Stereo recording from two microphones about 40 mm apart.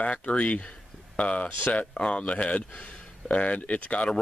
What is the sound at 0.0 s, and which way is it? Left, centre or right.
Speech, left.